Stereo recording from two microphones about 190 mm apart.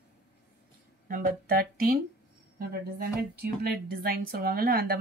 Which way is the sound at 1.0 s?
50° right (ahead or behind).